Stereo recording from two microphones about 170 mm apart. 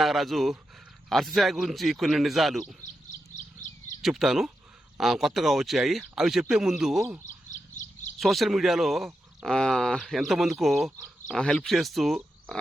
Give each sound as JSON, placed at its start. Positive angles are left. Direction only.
{"t": 0.0, "sound": "speech", "side_deg": 0}
{"t": 4.0, "sound": "speech", "side_deg": 0}
{"t": 7.5, "sound": "bird", "side_deg": 45}
{"t": 8.2, "sound": "speech", "side_deg": 0}